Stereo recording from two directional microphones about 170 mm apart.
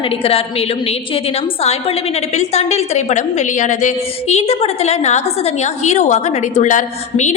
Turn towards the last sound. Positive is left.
turn(degrees=45)  # may be behind; listen again after turning